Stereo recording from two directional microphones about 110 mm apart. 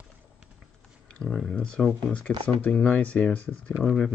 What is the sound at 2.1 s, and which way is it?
Speech, 15° left (ahead or behind).